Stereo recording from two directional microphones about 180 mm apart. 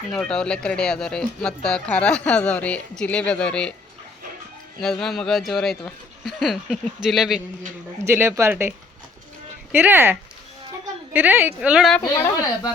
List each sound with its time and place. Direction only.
0.1 s speech: 5° left (ahead or behind)
4.8 s speech: 5° left (ahead or behind)
8.0 s a woman's voice: 15° right (ahead or behind)
9.7 s a woman's voice: 10° right (ahead or behind)
12.0 s a woman's voice: 15° left (ahead or behind)